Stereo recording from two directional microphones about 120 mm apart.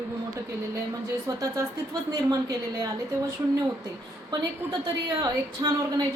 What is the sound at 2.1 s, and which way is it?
Speech, 30° right (ahead or behind).